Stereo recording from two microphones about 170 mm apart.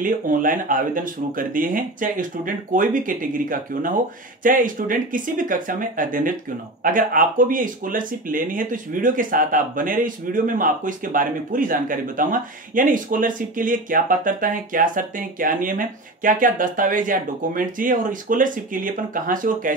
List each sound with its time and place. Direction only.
0.0 s speech: 50° right (ahead or behind)